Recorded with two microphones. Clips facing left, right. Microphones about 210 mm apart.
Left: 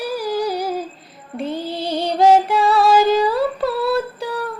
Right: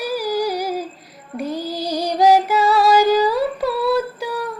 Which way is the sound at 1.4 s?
25° left (ahead or behind).